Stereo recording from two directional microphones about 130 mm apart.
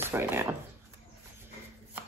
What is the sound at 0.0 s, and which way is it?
Speech, 20° right (ahead or behind).